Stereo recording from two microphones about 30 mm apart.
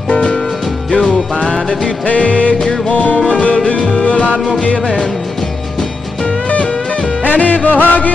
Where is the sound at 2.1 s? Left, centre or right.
Left.